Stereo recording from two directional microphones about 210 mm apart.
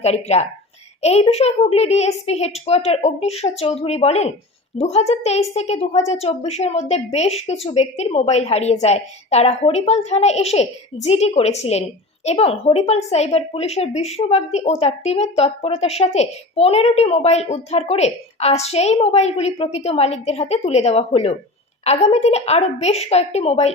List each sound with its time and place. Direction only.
0.0 s a woman's voice: 30° left (ahead or behind)